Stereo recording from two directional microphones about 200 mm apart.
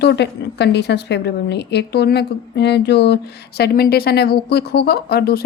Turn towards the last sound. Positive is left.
turn(degrees=50)  # may be behind; listen again after turning